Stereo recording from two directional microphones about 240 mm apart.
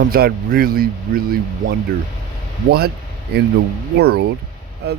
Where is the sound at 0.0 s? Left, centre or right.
Right.